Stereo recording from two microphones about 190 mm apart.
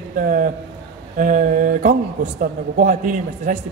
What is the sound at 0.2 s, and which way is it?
A woman's voice, 45° right (ahead or behind).